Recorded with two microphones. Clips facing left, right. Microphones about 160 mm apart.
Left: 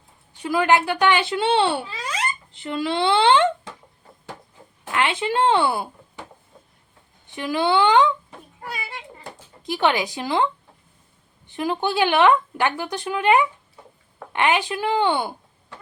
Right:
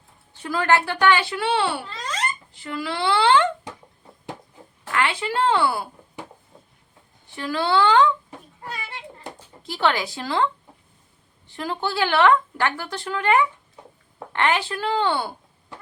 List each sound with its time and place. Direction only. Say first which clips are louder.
0.3 s a woman's voice: left 2 dB; 15° left (ahead or behind)
1.9 s a sound: left 1 dB; 10° left (ahead or behind)
2.5 s a woman's voice: left 4 dB; 25° left (ahead or behind)
4.9 s a woman's voice: left 2 dB; 20° left (ahead or behind)
7.3 s speech: left 2 dB; 20° left (ahead or behind)
8.6 s children playing: left 2 dB; 10° left (ahead or behind)
9.6 s speech: left 2 dB; 15° left (ahead or behind)